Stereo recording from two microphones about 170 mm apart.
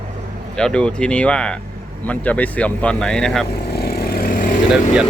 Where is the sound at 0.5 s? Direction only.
5° left (ahead or behind).